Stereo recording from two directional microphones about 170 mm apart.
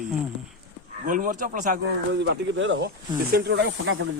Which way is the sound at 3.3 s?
70° right (ahead or behind).